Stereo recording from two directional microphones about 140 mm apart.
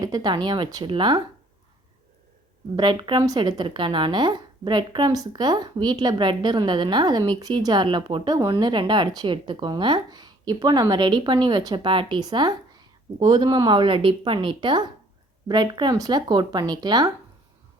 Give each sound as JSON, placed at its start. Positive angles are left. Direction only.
{"t": 0.0, "sound": "speech", "side_deg": -30}
{"t": 2.7, "sound": "speech", "side_deg": -30}